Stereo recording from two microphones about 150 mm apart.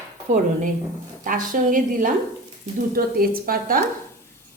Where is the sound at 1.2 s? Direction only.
65° right (ahead or behind).